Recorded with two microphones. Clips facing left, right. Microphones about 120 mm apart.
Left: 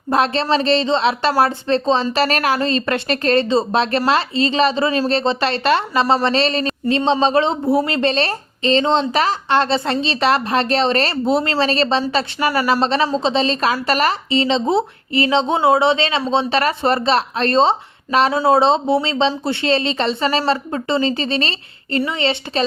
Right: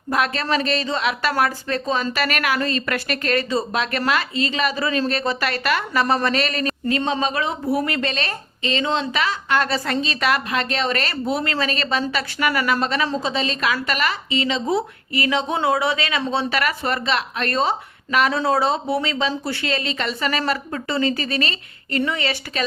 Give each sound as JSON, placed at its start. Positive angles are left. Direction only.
{"t": 0.1, "sound": "speech", "side_deg": 30}